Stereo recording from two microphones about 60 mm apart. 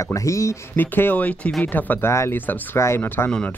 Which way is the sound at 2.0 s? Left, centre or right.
Left.